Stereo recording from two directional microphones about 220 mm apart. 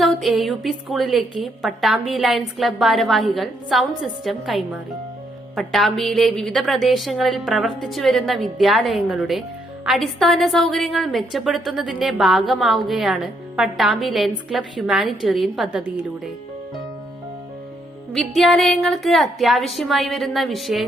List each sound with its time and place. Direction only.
0.0 s a woman's voice: centre (ahead or behind)
18.1 s a woman's voice: centre (ahead or behind)